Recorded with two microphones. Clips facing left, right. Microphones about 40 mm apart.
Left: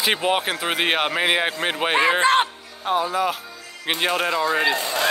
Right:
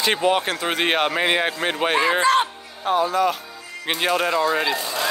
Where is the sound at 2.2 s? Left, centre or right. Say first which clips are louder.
Right 1 dB; left.